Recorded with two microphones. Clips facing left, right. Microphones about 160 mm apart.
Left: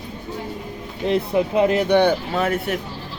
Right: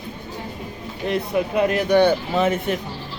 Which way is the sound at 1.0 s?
25° left (ahead or behind).